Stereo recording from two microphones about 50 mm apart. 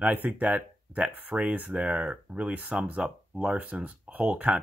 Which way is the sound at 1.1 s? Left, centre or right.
Right.